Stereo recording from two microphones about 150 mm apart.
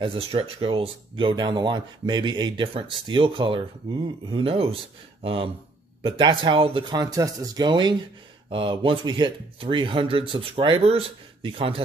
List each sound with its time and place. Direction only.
0.0 s speech: 40° right (ahead or behind)